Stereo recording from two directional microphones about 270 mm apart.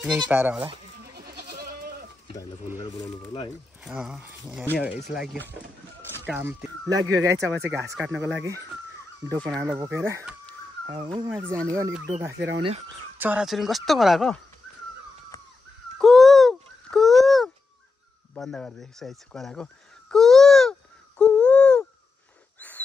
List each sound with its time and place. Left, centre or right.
0.3 s speech: centre
1.1 s goat: right
3.8 s speech: centre
12.3 s speech: right
13.2 s speech: centre
16.0 s a sound: centre
18.3 s speech: centre
21.2 s a sound: centre